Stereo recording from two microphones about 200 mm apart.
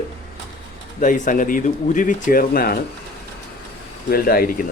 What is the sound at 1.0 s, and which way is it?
Speech, 40° left (ahead or behind).